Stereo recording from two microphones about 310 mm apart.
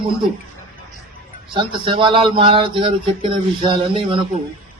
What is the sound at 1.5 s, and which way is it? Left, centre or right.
A man's voice, centre.